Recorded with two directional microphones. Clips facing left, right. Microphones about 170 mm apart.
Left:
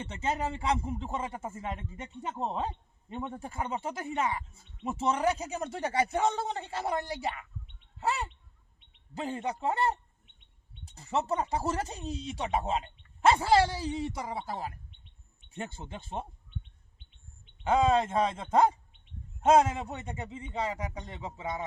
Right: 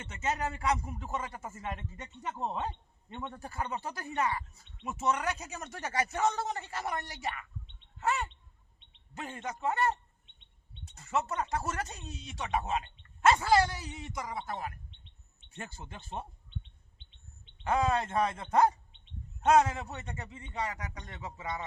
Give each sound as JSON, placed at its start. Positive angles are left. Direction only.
{"t": 0.0, "sound": "speech", "side_deg": 30}
{"t": 10.9, "sound": "speech", "side_deg": 30}
{"t": 17.6, "sound": "speech", "side_deg": 20}